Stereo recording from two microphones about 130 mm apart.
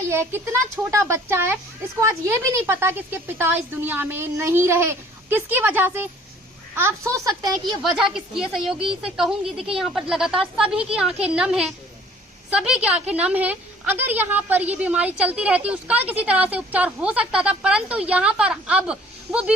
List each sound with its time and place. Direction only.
0.1 s a woman's voice: 20° right (ahead or behind)
7.6 s a woman's voice: centre (ahead or behind)